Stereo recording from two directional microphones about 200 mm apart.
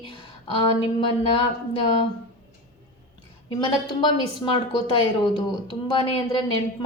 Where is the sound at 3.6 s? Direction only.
25° left (ahead or behind).